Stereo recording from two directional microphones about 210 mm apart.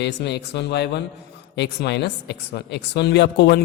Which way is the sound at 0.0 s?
55° left (ahead or behind).